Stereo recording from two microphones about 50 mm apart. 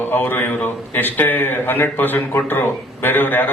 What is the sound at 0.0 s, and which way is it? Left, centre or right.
A man's voice, left.